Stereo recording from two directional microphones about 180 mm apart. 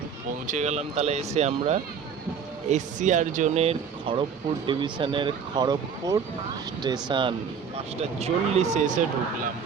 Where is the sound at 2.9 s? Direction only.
45° right (ahead or behind).